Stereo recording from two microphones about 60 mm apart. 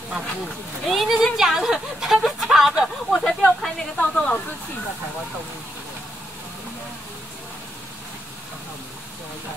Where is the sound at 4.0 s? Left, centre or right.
Centre.